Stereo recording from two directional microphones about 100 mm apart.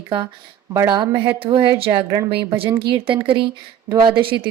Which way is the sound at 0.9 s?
45° right (ahead or behind).